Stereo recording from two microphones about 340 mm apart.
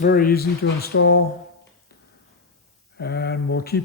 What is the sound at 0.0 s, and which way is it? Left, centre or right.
Speech, left.